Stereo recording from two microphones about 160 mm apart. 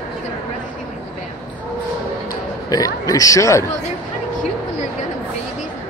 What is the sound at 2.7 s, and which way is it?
Speech, 20° left (ahead or behind).